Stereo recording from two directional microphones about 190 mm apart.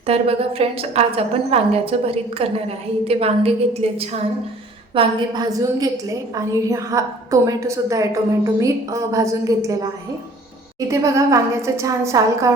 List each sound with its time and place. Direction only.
0.1 s a woman's voice: 30° right (ahead or behind)
4.9 s a woman's voice: 20° right (ahead or behind)